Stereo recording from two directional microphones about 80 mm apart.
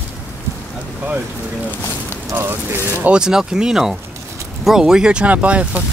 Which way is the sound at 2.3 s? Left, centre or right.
Right.